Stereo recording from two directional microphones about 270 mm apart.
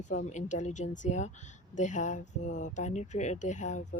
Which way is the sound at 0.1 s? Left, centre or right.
Left.